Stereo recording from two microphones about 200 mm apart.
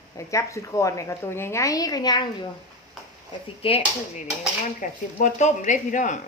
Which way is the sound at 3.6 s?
30° left (ahead or behind).